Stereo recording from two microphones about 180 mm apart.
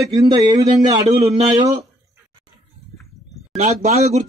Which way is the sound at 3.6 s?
40° right (ahead or behind).